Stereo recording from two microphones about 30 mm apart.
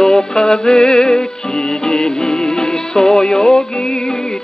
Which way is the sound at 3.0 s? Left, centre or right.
Left.